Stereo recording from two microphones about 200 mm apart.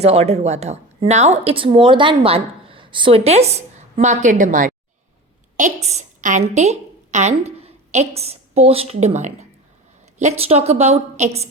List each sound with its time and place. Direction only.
0.0 s a woman's voice: 30° right (ahead or behind)